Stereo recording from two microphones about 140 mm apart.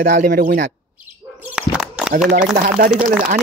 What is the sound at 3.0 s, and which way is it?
Speech, 60° right (ahead or behind).